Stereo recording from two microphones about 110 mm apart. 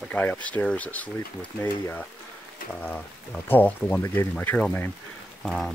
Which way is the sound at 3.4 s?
15° left (ahead or behind).